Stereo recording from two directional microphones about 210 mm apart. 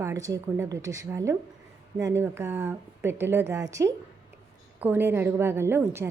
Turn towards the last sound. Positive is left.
turn(degrees=-10)  # may be behind; listen again after turning